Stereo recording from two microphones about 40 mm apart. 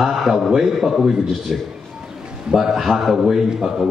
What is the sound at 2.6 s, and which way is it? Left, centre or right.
A man's voice, centre.